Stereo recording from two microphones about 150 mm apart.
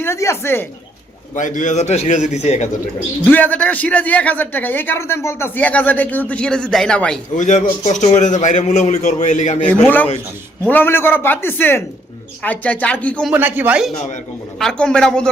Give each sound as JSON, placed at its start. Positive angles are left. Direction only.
{"t": 0.0, "sound": "a sound", "side_deg": 20}
{"t": 1.4, "sound": "a man's voice", "side_deg": 60}
{"t": 3.2, "sound": "a man's voice", "side_deg": 10}
{"t": 7.3, "sound": "a man's voice", "side_deg": 55}
{"t": 9.6, "sound": "a man's voice", "side_deg": 10}
{"t": 13.3, "sound": "speech", "side_deg": -10}
{"t": 14.6, "sound": "speech", "side_deg": 5}